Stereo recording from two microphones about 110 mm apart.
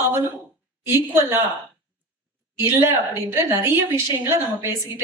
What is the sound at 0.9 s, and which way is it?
Speech, 25° right (ahead or behind).